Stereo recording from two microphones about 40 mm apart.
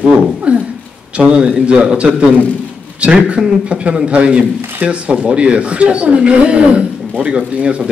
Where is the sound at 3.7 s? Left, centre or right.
Right.